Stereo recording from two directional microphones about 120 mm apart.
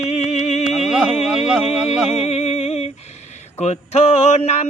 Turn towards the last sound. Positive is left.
turn(degrees=65)  # may be behind; listen again after turning